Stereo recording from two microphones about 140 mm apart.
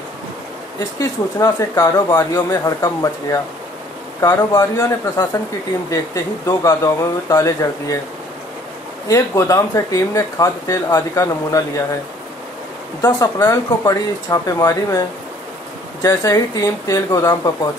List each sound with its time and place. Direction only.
0.7 s speech: 25° left (ahead or behind)
6.4 s speech: 25° left (ahead or behind)
9.0 s speech: 20° left (ahead or behind)
13.0 s speech: 25° left (ahead or behind)